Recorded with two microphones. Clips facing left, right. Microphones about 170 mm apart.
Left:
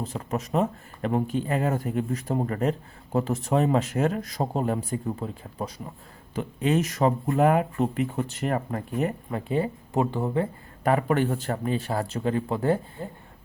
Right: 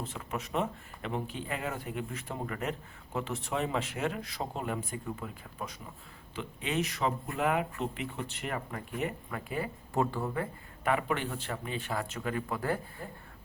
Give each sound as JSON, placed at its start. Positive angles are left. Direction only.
{"t": 0.0, "sound": "speech", "side_deg": 40}
{"t": 9.3, "sound": "speech", "side_deg": 25}
{"t": 10.8, "sound": "speech", "side_deg": 40}